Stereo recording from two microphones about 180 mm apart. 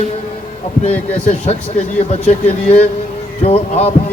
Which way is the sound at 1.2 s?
40° left (ahead or behind).